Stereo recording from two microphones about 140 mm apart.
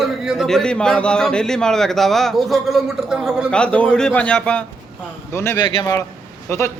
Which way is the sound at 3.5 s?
10° left (ahead or behind).